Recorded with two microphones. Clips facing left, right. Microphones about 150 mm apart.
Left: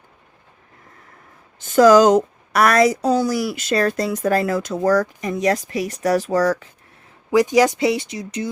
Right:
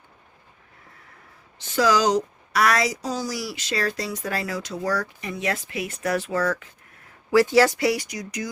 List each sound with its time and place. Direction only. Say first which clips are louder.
1.5 s a woman's voice: left 10 dB; 50° left (ahead or behind)
7.3 s speech: left 2 dB; 20° left (ahead or behind)